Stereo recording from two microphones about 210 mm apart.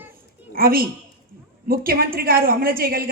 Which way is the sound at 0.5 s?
45° right (ahead or behind).